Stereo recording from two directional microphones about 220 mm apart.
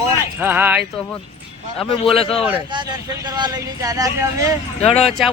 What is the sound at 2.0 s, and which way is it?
Speech, 25° left (ahead or behind).